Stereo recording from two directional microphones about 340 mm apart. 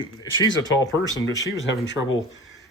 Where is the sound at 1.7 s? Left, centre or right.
Left.